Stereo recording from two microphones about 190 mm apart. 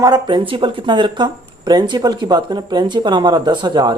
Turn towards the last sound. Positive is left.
turn(degrees=-20)  # may be behind; listen again after turning